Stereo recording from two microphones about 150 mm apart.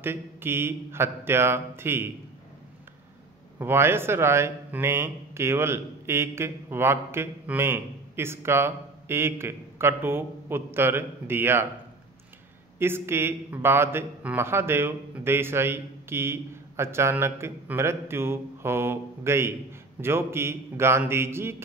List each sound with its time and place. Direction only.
0.0 s speech: 15° right (ahead or behind)
3.5 s speech: 15° right (ahead or behind)
12.7 s speech: 15° right (ahead or behind)